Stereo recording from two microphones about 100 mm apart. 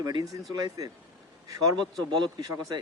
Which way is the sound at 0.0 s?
40° right (ahead or behind).